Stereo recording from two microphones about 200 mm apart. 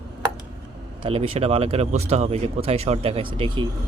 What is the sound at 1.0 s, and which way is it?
Speech, 30° right (ahead or behind).